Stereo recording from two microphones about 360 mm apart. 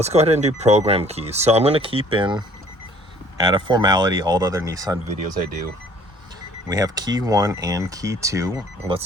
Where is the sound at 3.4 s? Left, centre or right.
Centre.